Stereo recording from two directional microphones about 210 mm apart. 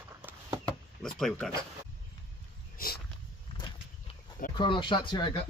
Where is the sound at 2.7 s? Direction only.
45° left (ahead or behind).